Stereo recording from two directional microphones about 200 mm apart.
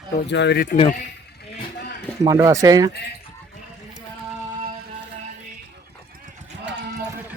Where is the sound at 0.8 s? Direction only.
40° left (ahead or behind).